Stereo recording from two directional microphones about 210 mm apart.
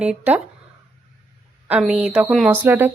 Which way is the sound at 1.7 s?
5° right (ahead or behind).